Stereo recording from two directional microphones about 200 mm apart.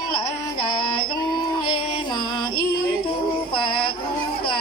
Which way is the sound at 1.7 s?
20° left (ahead or behind).